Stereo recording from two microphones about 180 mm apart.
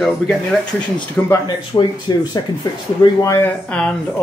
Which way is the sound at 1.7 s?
25° left (ahead or behind).